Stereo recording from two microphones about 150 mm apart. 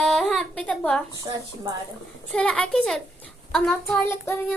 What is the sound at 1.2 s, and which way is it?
Speech, 25° right (ahead or behind).